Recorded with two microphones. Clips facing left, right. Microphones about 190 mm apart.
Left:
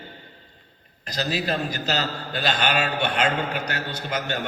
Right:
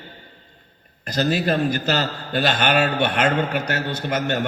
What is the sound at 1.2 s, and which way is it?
A man's voice, 55° right (ahead or behind).